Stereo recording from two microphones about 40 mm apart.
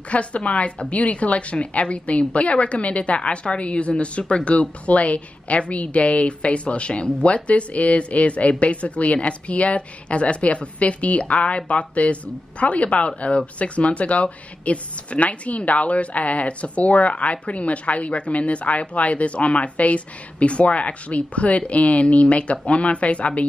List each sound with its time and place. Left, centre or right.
0.1 s speech: left